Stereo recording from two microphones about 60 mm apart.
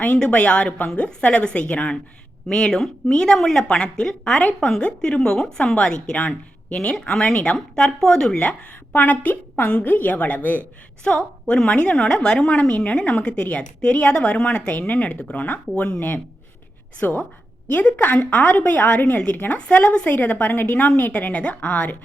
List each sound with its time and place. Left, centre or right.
0.3 s speech: centre
2.5 s a woman's voice: centre
8.4 s speech: left
11.0 s a woman's voice: centre